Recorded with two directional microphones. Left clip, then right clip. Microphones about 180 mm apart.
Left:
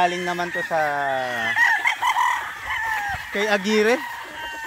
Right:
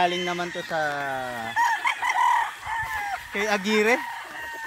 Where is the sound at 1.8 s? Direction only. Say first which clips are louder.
Left 4 dB; 40° right (ahead or behind).